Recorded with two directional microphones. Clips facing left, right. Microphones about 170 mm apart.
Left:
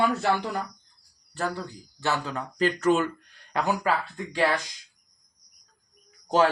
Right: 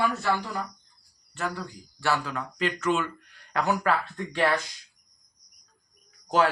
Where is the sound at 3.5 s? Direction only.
15° left (ahead or behind).